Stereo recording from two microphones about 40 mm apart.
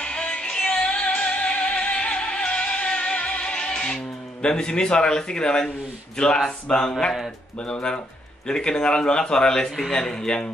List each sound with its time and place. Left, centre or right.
0.0 s music: left
6.1 s a man's voice: left